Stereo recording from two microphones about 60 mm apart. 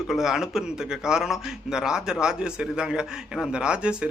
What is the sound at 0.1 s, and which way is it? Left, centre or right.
A man's voice, centre.